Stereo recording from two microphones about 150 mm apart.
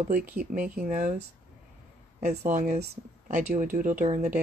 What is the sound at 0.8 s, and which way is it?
Speech, 50° right (ahead or behind).